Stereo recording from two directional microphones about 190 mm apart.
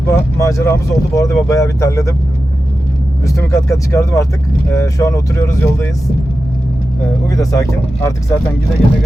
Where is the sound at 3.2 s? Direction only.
15° left (ahead or behind).